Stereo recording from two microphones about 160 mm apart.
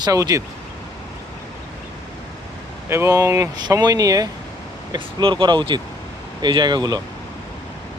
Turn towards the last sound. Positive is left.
turn(degrees=-25)  # may be behind; listen again after turning